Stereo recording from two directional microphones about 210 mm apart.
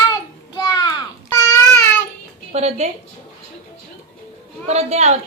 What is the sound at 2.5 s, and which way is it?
Speech, 30° right (ahead or behind).